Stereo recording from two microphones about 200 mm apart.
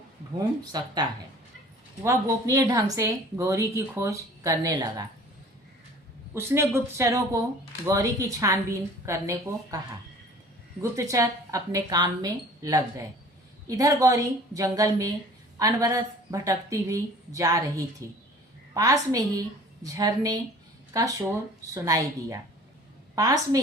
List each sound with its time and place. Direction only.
0.6 s speech: 20° right (ahead or behind)
2.0 s speech: 15° right (ahead or behind)
6.3 s speech: 15° right (ahead or behind)